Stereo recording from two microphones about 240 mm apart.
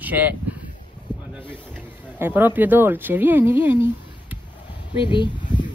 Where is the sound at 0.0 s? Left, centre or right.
Centre.